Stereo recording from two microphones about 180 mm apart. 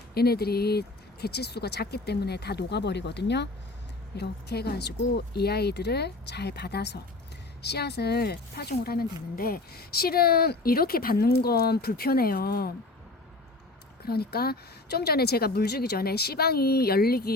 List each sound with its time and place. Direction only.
0.1 s speech: 60° left (ahead or behind)
14.0 s speech: 60° left (ahead or behind)